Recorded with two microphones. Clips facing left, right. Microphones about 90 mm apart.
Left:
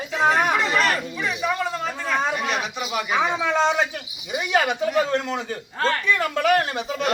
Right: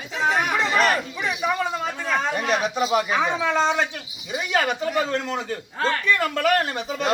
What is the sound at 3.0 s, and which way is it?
A man's voice, 5° left (ahead or behind).